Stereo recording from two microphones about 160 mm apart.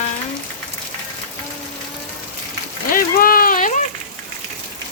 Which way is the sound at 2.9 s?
60° left (ahead or behind).